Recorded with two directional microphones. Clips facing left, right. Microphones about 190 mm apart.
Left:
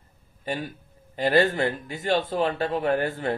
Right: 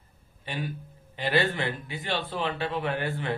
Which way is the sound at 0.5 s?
40° left (ahead or behind).